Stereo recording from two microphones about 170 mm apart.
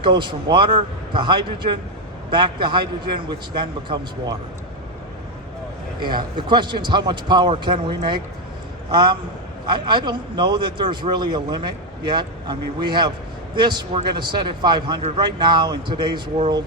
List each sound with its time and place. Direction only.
0.0 s a man's voice: 25° right (ahead or behind)
6.0 s a man's voice: 25° right (ahead or behind)